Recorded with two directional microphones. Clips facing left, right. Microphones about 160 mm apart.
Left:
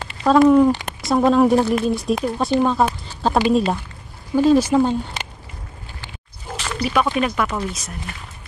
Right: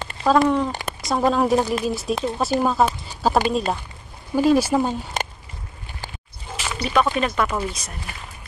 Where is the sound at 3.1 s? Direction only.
5° right (ahead or behind).